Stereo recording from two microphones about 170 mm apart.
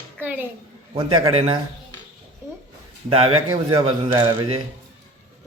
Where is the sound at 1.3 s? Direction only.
35° right (ahead or behind).